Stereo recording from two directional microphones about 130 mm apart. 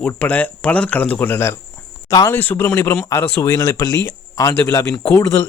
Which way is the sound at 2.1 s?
30° left (ahead or behind).